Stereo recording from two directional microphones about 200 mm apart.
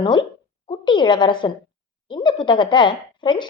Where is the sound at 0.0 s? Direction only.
25° left (ahead or behind).